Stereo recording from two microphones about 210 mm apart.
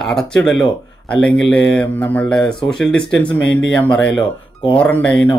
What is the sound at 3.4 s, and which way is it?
Speech, 60° left (ahead or behind).